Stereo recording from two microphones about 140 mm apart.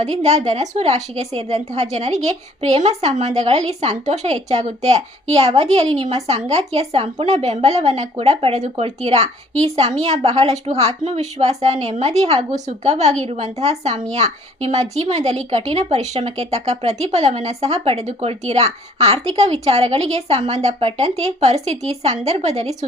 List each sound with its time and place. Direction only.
0.0 s a woman's voice: 55° right (ahead or behind)